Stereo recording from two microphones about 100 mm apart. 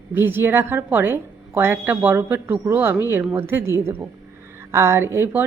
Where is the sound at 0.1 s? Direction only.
20° right (ahead or behind).